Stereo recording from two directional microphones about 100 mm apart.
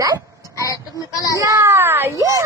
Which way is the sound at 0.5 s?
35° left (ahead or behind).